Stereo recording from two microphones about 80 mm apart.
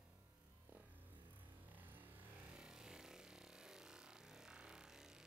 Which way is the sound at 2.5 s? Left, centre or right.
Centre.